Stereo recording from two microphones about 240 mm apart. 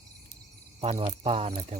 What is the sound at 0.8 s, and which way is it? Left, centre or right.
Speech, right.